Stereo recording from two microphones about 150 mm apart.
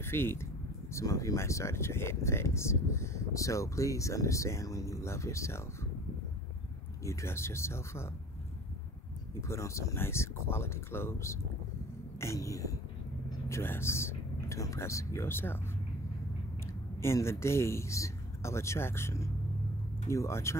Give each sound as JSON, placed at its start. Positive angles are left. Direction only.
{"t": 0.0, "sound": "speech", "side_deg": 15}
{"t": 7.1, "sound": "speech", "side_deg": 20}
{"t": 9.5, "sound": "speech", "side_deg": 20}
{"t": 17.0, "sound": "speech", "side_deg": 20}